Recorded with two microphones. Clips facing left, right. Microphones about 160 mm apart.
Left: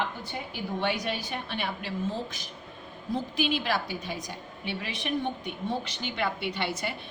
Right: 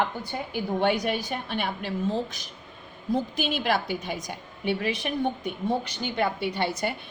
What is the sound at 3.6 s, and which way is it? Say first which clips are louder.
A woman's voice: right 4 dB; 55° right (ahead or behind).